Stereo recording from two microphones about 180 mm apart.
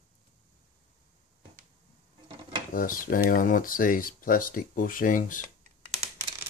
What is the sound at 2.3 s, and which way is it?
Dishes, 30° right (ahead or behind).